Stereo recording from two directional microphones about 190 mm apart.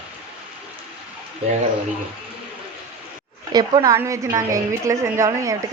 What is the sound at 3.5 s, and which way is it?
A woman's voice, 20° right (ahead or behind).